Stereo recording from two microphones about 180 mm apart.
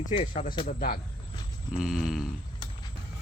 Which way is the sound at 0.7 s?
55° left (ahead or behind).